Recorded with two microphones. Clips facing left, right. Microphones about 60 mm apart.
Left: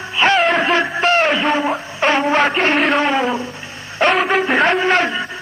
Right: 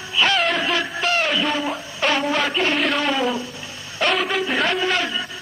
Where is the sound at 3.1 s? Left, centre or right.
Left.